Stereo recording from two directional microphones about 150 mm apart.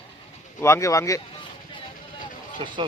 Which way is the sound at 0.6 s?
20° left (ahead or behind).